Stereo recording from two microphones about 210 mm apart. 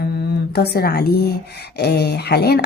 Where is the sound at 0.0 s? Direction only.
50° left (ahead or behind).